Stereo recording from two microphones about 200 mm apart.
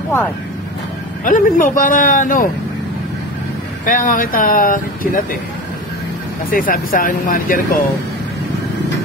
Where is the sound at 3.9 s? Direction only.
45° left (ahead or behind).